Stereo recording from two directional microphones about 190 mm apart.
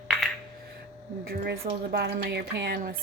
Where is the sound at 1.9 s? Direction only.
60° right (ahead or behind).